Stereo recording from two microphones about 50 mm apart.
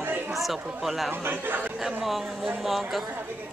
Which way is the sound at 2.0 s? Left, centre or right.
Centre.